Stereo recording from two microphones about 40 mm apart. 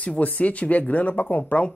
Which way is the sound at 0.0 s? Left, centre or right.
Left.